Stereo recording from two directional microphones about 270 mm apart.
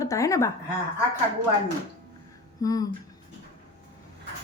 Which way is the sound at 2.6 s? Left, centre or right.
Centre.